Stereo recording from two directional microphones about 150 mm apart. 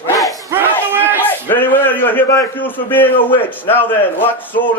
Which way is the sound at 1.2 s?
15° left (ahead or behind).